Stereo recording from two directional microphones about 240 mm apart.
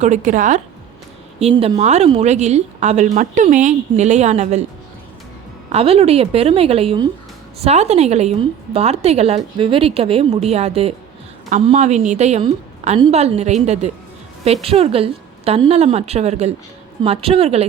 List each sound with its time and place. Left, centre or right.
0.0 s a woman's voice: right
5.7 s a woman's voice: right